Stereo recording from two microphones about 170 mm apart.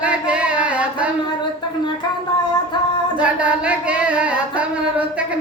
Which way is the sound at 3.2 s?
5° right (ahead or behind).